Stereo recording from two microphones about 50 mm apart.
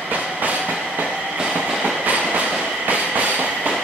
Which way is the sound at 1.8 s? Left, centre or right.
Right.